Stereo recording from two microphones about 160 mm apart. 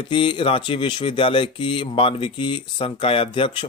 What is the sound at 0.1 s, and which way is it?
Speech, 30° left (ahead or behind).